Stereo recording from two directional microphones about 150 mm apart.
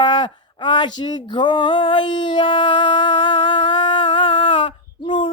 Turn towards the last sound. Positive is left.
turn(degrees=35)  # may be behind; listen again after turning